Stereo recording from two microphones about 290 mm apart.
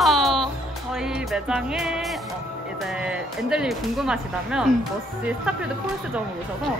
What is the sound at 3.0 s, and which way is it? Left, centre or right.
Speech, centre.